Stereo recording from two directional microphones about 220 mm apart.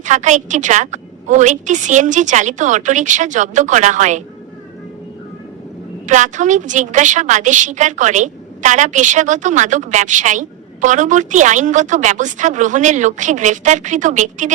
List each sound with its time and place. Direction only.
0.0 s a woman's voice: 35° right (ahead or behind)
6.1 s a woman's voice: 35° right (ahead or behind)